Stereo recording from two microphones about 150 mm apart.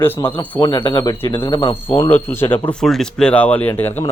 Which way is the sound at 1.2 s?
15° left (ahead or behind).